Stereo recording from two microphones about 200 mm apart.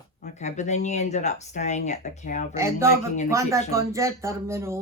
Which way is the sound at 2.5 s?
15° right (ahead or behind).